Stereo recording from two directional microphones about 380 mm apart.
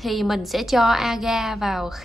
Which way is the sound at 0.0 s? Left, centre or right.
Centre.